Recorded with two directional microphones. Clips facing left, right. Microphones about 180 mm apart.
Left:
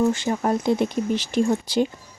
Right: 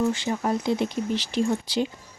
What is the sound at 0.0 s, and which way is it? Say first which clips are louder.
Speech: left 3 dB; 50° left (ahead or behind).